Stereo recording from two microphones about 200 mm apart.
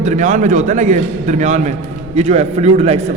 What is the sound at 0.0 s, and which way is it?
A man's voice, 35° right (ahead or behind).